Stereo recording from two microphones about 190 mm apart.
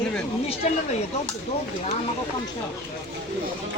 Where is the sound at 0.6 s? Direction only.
35° left (ahead or behind).